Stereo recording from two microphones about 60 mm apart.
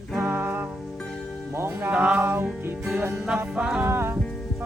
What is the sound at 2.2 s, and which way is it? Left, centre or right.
Music, right.